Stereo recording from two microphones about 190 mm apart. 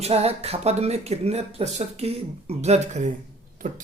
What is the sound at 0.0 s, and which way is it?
Speech, 35° right (ahead or behind).